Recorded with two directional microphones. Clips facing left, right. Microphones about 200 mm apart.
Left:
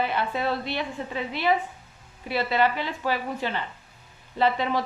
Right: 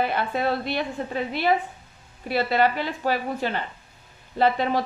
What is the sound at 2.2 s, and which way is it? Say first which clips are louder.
A woman's voice: right 2 dB; 40° right (ahead or behind).